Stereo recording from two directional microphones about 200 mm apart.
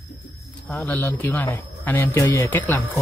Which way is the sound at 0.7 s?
10° left (ahead or behind).